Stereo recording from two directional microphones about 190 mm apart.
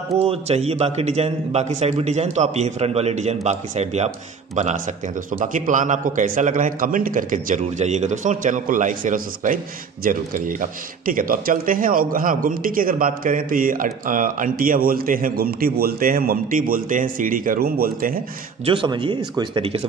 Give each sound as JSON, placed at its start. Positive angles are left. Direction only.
{"t": 0.2, "sound": "a man's voice", "side_deg": -35}
{"t": 18.7, "sound": "speech", "side_deg": -25}